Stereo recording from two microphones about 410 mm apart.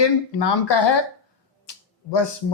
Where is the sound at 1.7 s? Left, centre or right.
Left.